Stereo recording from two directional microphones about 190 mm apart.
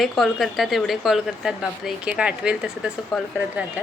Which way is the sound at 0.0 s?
Centre (ahead or behind).